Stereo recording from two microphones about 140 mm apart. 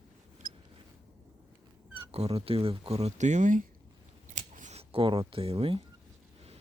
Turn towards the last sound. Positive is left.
turn(degrees=-45)  # may be behind; listen again after turning